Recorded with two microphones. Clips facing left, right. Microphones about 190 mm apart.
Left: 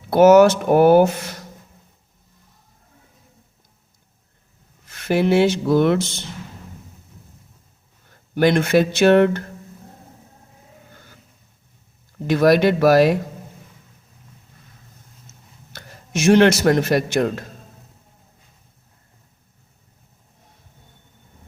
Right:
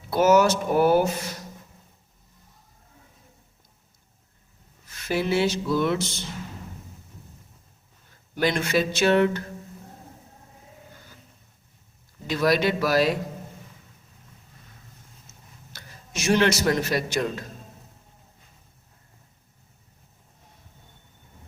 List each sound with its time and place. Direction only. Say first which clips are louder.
0.1 s speech: left 8 dB; 60° left (ahead or behind)
4.9 s speech: left 7 dB; 60° left (ahead or behind)
8.4 s speech: left 7 dB; 55° left (ahead or behind)
12.3 s speech: left 7 dB; 55° left (ahead or behind)
15.7 s a man's voice: left 10 dB; 55° left (ahead or behind)